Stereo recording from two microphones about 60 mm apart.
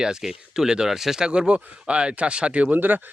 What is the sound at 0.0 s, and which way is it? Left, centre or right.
Speech, centre.